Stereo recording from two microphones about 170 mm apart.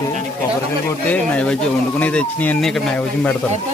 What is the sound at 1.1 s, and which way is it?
Speech, 5° left (ahead or behind).